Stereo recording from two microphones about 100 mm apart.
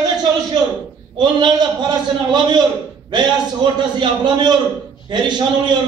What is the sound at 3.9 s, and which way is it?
A man's voice, 50° right (ahead or behind).